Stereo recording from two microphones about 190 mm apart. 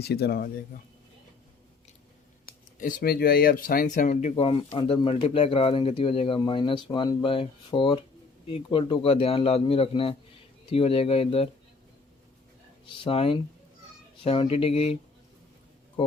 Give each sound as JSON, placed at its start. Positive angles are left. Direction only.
{"t": 0.0, "sound": "speech", "side_deg": 60}
{"t": 2.5, "sound": "speech", "side_deg": 50}
{"t": 12.8, "sound": "speech", "side_deg": 30}
{"t": 16.0, "sound": "speech", "side_deg": 25}